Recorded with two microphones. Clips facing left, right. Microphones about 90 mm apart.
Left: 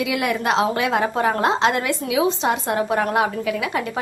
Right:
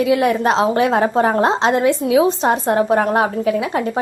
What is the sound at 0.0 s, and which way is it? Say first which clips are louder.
A woman's voice: right 7 dB; 35° right (ahead or behind).